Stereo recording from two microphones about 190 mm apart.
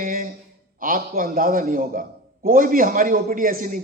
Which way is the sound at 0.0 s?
45° right (ahead or behind).